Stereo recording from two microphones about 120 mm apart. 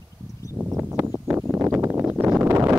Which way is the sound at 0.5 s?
15° right (ahead or behind).